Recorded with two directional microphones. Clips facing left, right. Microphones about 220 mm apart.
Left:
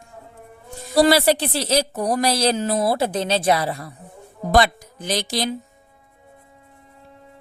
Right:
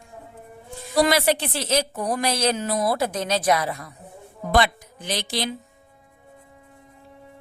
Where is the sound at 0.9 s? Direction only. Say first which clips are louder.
Left 4 dB; 35° left (ahead or behind).